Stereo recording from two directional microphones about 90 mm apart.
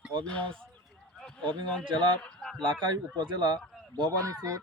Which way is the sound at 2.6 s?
65° right (ahead or behind).